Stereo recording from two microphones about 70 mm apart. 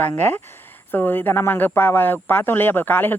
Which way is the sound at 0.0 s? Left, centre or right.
Left.